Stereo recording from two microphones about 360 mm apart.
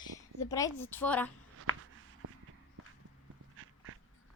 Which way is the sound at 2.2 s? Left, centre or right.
Right.